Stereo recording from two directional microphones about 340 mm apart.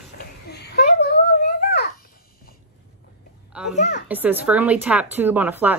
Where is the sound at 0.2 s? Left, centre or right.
Left.